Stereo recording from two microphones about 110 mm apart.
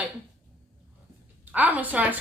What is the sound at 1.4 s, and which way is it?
Speech, 15° right (ahead or behind).